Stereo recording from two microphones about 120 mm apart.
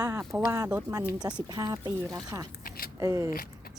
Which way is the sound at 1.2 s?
35° right (ahead or behind).